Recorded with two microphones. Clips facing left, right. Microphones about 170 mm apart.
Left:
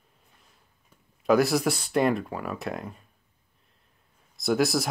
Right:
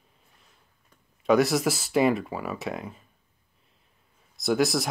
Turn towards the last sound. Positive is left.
turn(degrees=0)  # may be behind; listen again after turning